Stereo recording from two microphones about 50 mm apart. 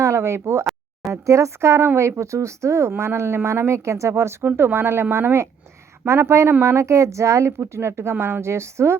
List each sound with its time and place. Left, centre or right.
0.0 s speech: right
1.1 s a woman's voice: right
2.0 s a woman's voice: right
4.4 s a woman's voice: right